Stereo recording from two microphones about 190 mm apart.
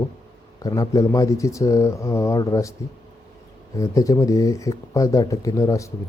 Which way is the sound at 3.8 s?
15° left (ahead or behind).